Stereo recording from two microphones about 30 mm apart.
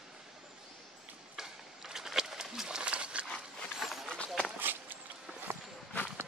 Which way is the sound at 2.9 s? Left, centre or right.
Right.